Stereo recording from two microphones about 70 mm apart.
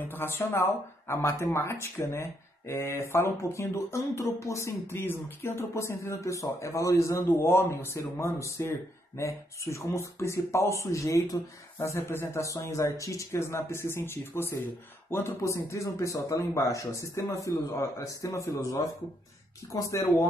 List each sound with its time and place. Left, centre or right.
0.0 s speech: left
5.0 s speech: left
12.4 s speech: left